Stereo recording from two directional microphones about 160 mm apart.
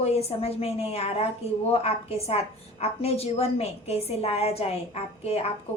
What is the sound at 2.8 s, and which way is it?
A woman's voice, 40° left (ahead or behind).